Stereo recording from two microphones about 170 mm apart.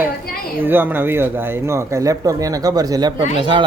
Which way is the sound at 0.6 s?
10° right (ahead or behind).